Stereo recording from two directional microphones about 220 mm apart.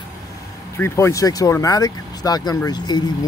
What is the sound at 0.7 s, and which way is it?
Speech, 10° left (ahead or behind).